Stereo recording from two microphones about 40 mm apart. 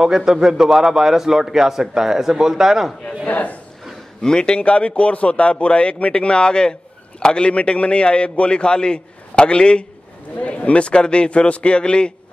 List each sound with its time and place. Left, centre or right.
0.0 s a man's voice: centre
3.3 s speech: left
4.2 s a man's voice: left